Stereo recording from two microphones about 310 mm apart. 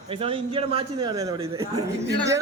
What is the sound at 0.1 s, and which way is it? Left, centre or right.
Speech, centre.